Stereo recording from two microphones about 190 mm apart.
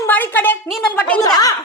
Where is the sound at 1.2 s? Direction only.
20° left (ahead or behind).